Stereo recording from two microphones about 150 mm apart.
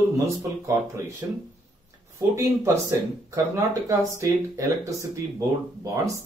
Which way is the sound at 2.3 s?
20° right (ahead or behind).